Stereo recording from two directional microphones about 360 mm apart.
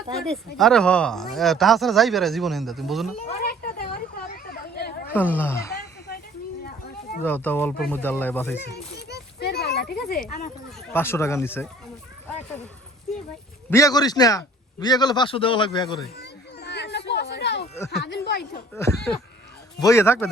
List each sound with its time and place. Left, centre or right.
0.1 s speech: centre
3.2 s a sound: left
5.1 s speech: centre
7.2 s speech: centre
9.0 s a sound: left
10.2 s speech: left
10.8 s a man's voice: centre
13.7 s a man's voice: centre
16.1 s children playing: left
17.1 s a sound: left
18.7 s a man's voice: centre